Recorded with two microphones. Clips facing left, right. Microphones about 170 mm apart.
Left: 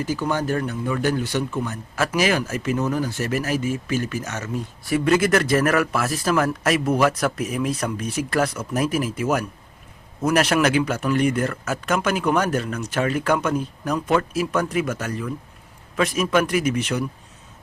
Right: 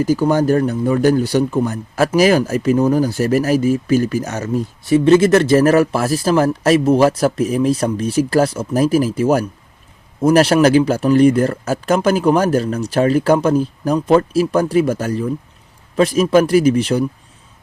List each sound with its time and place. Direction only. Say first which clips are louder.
0.0 s speech: right 9 dB; 40° right (ahead or behind)
4.9 s speech: right 8 dB; 25° right (ahead or behind)